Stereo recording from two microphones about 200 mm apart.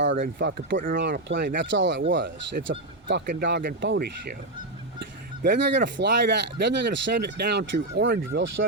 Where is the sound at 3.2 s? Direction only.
50° right (ahead or behind).